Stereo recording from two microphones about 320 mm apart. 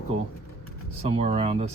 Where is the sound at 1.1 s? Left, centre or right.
Centre.